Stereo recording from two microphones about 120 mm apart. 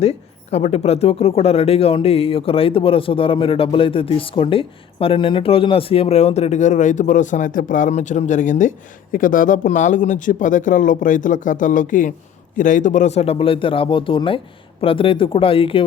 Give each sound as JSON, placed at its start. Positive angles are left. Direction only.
{"t": 0.0, "sound": "a man's voice", "side_deg": 60}